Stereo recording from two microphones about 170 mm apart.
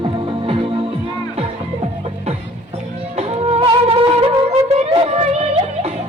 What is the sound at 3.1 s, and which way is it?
Music, 40° right (ahead or behind).